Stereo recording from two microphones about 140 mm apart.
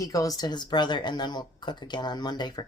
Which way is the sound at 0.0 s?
25° left (ahead or behind).